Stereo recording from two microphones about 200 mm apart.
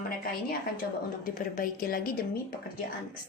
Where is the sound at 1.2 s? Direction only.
40° left (ahead or behind).